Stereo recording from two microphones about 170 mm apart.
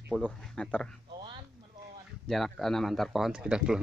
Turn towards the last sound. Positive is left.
turn(degrees=-5)  # may be behind; listen again after turning